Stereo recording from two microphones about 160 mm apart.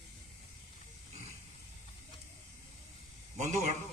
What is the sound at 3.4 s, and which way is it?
Speech, 50° right (ahead or behind).